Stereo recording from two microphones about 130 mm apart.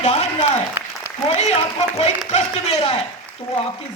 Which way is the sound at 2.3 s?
55° left (ahead or behind).